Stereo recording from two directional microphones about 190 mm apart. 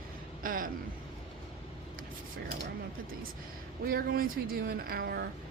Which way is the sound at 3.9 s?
50° right (ahead or behind).